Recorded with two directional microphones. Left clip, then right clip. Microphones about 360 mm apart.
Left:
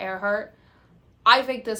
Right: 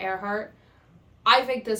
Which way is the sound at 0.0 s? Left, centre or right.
Centre.